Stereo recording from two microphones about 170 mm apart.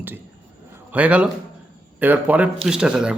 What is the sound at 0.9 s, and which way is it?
A man's voice, 10° right (ahead or behind).